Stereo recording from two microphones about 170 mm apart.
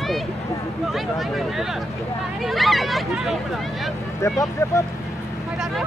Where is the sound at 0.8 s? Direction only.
Centre (ahead or behind).